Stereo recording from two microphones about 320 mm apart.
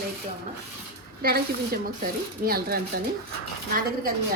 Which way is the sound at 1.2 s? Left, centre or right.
Right.